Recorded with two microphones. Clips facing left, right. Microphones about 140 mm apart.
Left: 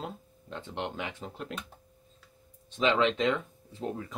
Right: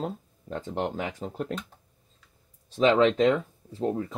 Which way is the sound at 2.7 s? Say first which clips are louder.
Right 6 dB; 35° right (ahead or behind).